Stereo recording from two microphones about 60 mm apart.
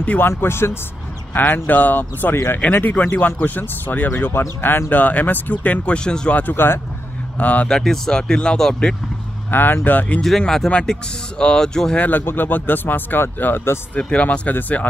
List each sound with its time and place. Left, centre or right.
0.2 s speech: left
1.3 s speech: left
2.3 s speech: left
2.6 s speech: left; by 6.4 s centre
6.4 s speech: left
7.3 s speech: left
7.6 s speech: centre
9.5 s speech: left
10.4 s speech: centre
12.0 s speech: left
14.1 s speech: left